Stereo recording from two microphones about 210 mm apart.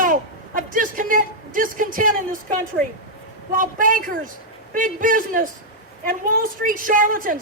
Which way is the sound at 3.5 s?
40° right (ahead or behind).